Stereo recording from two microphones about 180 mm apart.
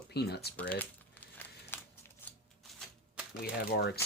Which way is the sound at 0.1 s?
65° left (ahead or behind).